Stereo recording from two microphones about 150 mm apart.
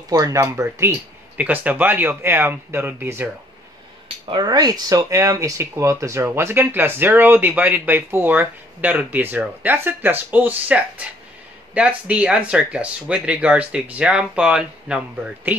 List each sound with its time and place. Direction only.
0.1 s speech: 20° right (ahead or behind)
4.3 s speech: 30° right (ahead or behind); by 15.5 s 5° right (ahead or behind)